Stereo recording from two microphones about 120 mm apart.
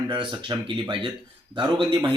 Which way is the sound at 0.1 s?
40° right (ahead or behind).